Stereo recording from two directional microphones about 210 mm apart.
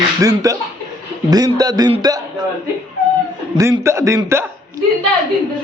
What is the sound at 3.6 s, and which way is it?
A man's voice, 15° right (ahead or behind).